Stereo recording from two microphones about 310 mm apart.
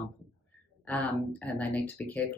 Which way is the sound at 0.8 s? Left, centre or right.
Centre.